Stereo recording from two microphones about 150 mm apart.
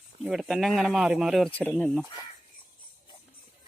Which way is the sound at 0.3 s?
Centre (ahead or behind).